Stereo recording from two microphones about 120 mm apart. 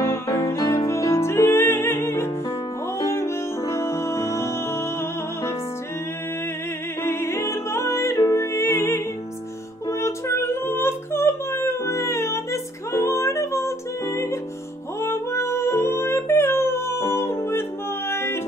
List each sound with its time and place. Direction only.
0.0 s music: 20° left (ahead or behind)
7.0 s music: 20° left (ahead or behind)
9.8 s female singing: 25° left (ahead or behind)
15.0 s music: 20° left (ahead or behind)